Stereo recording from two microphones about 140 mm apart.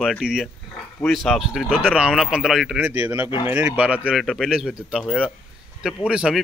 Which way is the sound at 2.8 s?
15° right (ahead or behind).